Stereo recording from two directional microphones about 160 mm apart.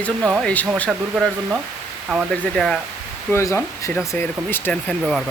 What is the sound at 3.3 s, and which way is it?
Speech, 20° left (ahead or behind).